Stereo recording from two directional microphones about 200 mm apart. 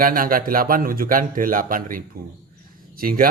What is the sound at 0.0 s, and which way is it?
Speech, 45° right (ahead or behind).